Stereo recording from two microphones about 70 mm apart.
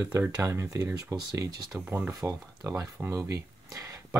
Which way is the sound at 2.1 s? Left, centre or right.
Right.